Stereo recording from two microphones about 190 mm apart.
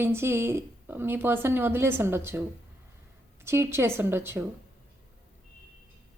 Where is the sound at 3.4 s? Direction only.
15° right (ahead or behind).